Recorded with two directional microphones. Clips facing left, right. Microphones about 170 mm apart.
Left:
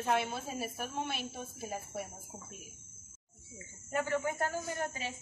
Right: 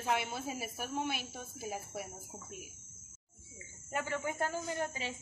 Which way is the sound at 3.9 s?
15° right (ahead or behind).